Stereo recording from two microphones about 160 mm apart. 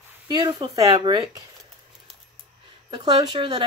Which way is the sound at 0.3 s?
25° right (ahead or behind).